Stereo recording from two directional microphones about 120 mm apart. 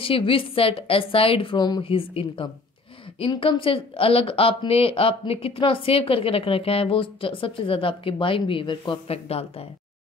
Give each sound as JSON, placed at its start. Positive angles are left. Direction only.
{"t": 0.0, "sound": "a woman's voice", "side_deg": 50}
{"t": 9.1, "sound": "speech", "side_deg": 55}